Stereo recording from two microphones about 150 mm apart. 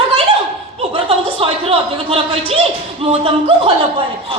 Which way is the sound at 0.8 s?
40° right (ahead or behind).